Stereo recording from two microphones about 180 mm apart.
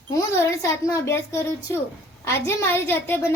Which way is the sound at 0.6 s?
15° left (ahead or behind).